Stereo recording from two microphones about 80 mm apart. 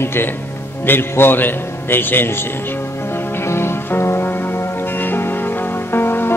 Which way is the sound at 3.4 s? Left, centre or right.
Left.